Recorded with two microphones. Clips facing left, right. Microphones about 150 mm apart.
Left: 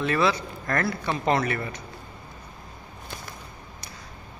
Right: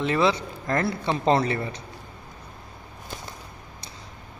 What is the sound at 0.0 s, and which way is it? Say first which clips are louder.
Speech: right 1 dB; 20° right (ahead or behind).